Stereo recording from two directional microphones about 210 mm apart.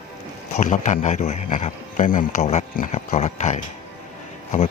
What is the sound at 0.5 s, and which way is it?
A man's voice, 35° left (ahead or behind).